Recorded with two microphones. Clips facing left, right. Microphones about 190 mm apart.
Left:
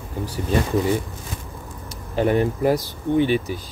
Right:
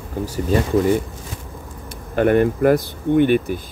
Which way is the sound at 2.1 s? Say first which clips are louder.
Right 4 dB; 60° right (ahead or behind).